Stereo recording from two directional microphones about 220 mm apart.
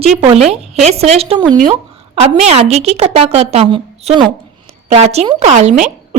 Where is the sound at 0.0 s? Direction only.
25° right (ahead or behind).